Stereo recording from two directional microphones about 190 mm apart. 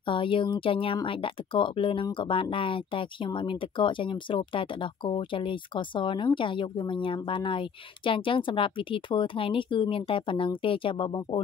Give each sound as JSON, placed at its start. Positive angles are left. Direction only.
{"t": 0.1, "sound": "speech", "side_deg": 25}